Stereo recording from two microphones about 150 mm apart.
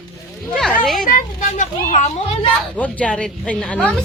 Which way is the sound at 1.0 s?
65° left (ahead or behind).